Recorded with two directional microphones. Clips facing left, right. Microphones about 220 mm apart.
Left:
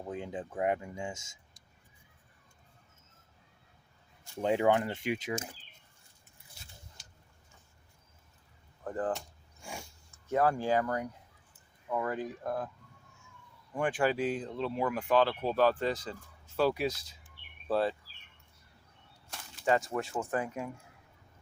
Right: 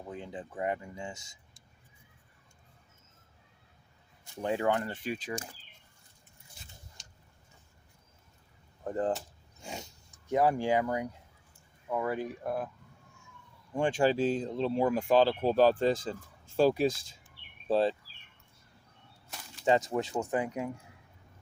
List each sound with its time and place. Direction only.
0.1 s speech: 20° left (ahead or behind)
4.4 s speech: 20° left (ahead or behind)
8.8 s speech: 25° right (ahead or behind)
13.7 s speech: 25° right (ahead or behind); by 17.1 s 45° right (ahead or behind)
17.7 s speech: 25° right (ahead or behind)
19.6 s speech: 20° right (ahead or behind)